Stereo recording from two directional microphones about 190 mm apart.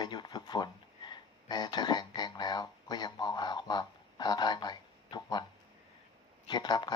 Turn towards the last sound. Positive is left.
turn(degrees=20)  # may be behind; listen again after turning